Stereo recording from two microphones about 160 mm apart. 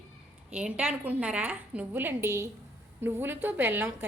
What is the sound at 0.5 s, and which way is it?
A woman's voice, 5° right (ahead or behind).